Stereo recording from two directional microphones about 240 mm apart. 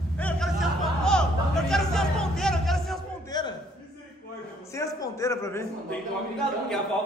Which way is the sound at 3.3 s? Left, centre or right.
Centre.